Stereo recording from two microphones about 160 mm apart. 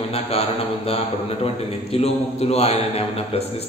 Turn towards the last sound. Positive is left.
turn(degrees=40)  # may be behind; listen again after turning